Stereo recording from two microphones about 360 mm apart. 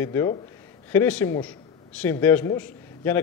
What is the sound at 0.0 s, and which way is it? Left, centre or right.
A man's voice, centre.